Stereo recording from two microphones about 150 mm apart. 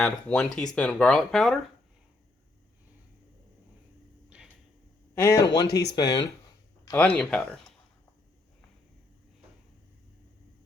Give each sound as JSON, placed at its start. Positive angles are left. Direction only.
{"t": 0.0, "sound": "speech", "side_deg": 5}
{"t": 4.3, "sound": "a sound", "side_deg": -10}
{"t": 5.1, "sound": "speech", "side_deg": 20}
{"t": 6.9, "sound": "speech", "side_deg": 10}